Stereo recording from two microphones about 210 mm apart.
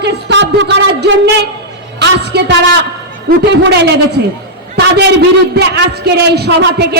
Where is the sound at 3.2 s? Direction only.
50° right (ahead or behind).